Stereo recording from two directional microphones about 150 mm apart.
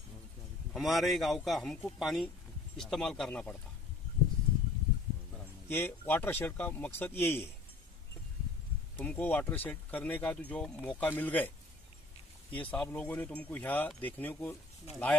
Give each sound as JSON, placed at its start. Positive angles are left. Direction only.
{"t": 0.7, "sound": "a man's voice", "side_deg": 0}
{"t": 5.7, "sound": "speech", "side_deg": 15}
{"t": 8.9, "sound": "speech", "side_deg": 10}
{"t": 12.5, "sound": "speech", "side_deg": 5}